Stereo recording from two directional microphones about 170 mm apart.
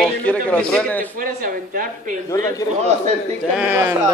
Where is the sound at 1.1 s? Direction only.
55° right (ahead or behind).